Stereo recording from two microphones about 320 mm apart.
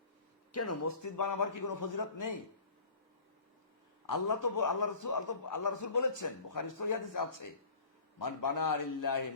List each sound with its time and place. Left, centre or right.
0.5 s a man's voice: left
4.1 s a man's voice: left